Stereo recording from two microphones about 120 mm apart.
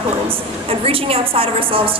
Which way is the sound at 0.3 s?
50° right (ahead or behind).